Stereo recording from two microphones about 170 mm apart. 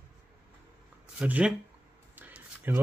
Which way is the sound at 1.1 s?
5° right (ahead or behind).